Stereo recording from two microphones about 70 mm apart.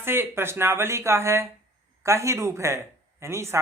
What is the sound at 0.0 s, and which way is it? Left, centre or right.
Speech, right.